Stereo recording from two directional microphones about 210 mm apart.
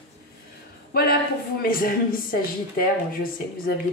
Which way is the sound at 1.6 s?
45° left (ahead or behind).